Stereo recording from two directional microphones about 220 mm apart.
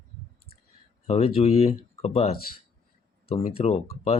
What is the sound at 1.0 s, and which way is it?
Speech, 30° left (ahead or behind).